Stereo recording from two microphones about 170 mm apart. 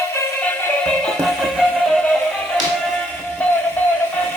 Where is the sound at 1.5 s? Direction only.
5° left (ahead or behind).